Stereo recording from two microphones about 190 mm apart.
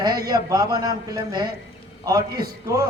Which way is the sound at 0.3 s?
20° right (ahead or behind).